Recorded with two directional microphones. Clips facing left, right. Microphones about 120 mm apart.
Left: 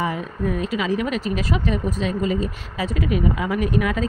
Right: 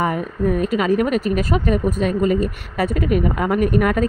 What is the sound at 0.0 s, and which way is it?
Speech, 50° right (ahead or behind).